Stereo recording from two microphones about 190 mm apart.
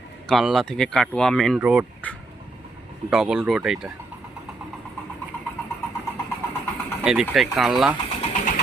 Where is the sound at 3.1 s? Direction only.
5° right (ahead or behind).